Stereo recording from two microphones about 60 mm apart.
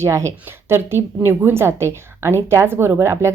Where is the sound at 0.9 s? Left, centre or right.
Right.